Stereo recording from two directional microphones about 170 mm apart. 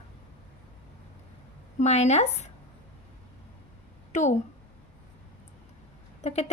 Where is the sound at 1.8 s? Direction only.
40° left (ahead or behind).